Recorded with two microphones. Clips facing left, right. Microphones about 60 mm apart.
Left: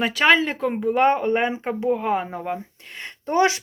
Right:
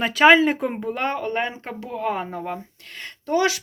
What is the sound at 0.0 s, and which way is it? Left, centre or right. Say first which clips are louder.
Speech: right 3 dB; centre.